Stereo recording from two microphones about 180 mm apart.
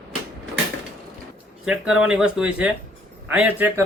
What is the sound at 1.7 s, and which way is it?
A man's voice, 5° right (ahead or behind).